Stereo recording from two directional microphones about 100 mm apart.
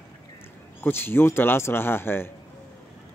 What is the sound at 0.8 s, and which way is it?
Speech, 20° left (ahead or behind).